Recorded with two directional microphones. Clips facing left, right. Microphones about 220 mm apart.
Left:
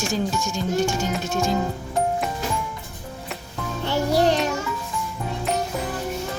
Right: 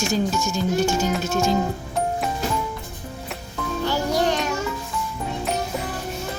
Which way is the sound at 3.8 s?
30° left (ahead or behind).